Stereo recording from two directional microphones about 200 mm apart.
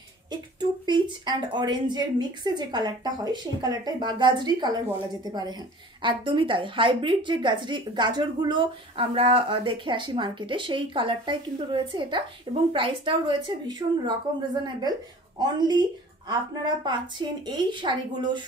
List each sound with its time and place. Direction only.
0.3 s a woman's voice: 20° right (ahead or behind)
16.8 s a woman's voice: 25° right (ahead or behind)